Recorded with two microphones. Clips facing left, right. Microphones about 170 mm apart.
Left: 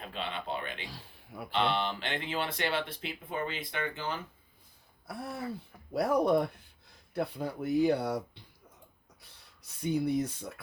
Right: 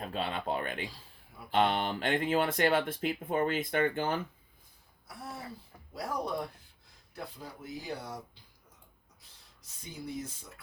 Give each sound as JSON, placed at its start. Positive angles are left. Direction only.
{"t": 0.0, "sound": "speech", "side_deg": -40}
{"t": 0.9, "sound": "speech", "side_deg": 70}
{"t": 1.5, "sound": "speech", "side_deg": -50}
{"t": 5.0, "sound": "speech", "side_deg": 60}
{"t": 9.2, "sound": "speech", "side_deg": 65}